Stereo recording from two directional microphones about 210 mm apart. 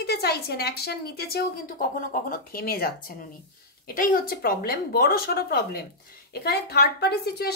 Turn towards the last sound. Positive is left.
turn(degrees=50)  # may be behind; listen again after turning